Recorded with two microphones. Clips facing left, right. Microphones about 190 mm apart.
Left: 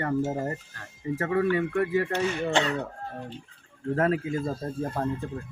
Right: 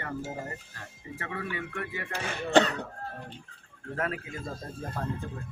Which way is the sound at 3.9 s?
35° left (ahead or behind).